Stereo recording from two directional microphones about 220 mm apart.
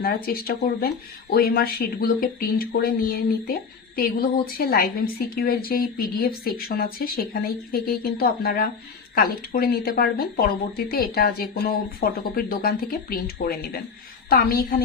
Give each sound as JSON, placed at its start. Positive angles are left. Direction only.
{"t": 0.0, "sound": "speech", "side_deg": 40}